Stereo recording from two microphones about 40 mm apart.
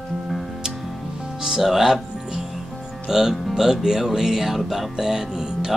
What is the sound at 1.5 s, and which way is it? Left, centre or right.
Music, centre.